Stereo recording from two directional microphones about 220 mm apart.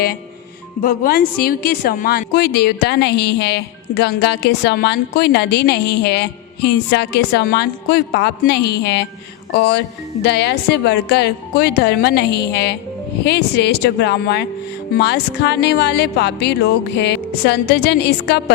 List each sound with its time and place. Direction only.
0.8 s a woman's voice: 40° left (ahead or behind)